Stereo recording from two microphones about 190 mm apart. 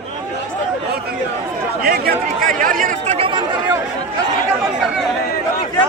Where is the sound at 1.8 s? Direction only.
50° right (ahead or behind).